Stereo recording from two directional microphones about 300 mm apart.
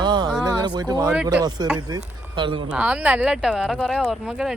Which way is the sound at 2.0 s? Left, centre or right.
Centre.